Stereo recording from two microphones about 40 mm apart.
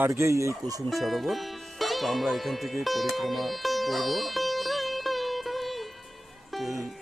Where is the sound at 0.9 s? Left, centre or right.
Centre.